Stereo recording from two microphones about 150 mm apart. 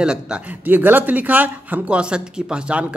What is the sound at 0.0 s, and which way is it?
Speech, 5° right (ahead or behind).